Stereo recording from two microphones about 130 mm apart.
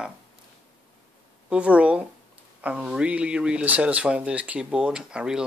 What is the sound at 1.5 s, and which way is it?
Speech, 10° right (ahead or behind).